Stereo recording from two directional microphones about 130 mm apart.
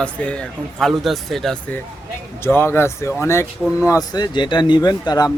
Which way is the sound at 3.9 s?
30° left (ahead or behind).